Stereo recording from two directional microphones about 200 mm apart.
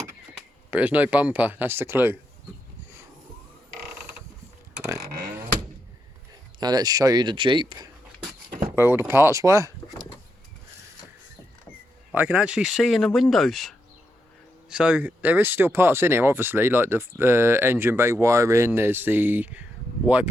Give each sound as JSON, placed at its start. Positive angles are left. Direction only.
{"t": 0.7, "sound": "speech", "side_deg": -5}
{"t": 6.6, "sound": "speech", "side_deg": -20}
{"t": 8.4, "sound": "a sound", "side_deg": -45}
{"t": 8.9, "sound": "speech", "side_deg": -10}
{"t": 12.1, "sound": "speech", "side_deg": -10}